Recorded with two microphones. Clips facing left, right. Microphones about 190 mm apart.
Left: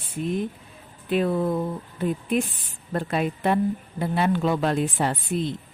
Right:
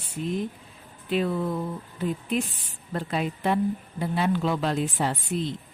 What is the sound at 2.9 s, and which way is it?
A woman's voice, 55° left (ahead or behind).